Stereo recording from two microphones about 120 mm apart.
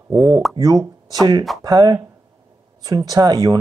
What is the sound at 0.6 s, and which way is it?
Speech, 30° right (ahead or behind).